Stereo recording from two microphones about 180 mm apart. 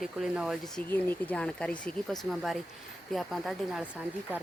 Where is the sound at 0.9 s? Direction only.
10° left (ahead or behind).